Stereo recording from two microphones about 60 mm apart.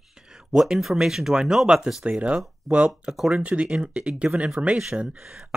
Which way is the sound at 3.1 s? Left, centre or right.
Centre.